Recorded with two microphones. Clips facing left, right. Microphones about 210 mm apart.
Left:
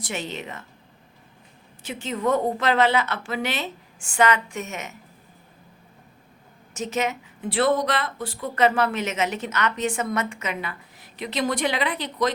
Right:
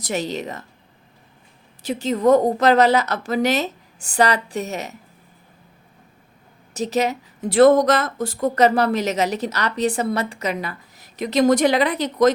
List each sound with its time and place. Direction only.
0.0 s speech: 40° right (ahead or behind)
1.8 s speech: 40° right (ahead or behind)
6.7 s speech: 35° right (ahead or behind)